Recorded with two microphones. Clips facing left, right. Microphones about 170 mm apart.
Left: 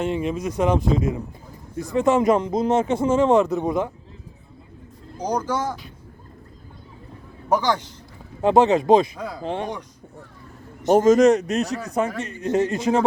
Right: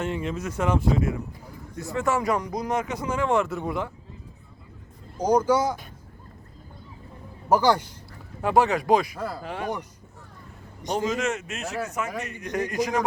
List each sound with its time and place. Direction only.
0.0 s a man's voice: 15° left (ahead or behind)
5.2 s speech: 10° right (ahead or behind)
7.5 s speech: 10° right (ahead or behind)
8.4 s a man's voice: 20° left (ahead or behind)
9.1 s speech: 5° right (ahead or behind)
9.4 s a man's voice: 25° left (ahead or behind)
10.8 s a man's voice: 45° left (ahead or behind); by 13.1 s 25° left (ahead or behind)